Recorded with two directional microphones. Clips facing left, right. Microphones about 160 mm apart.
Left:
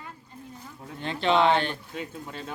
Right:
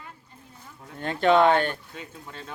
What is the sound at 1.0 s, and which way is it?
Speech, 50° right (ahead or behind).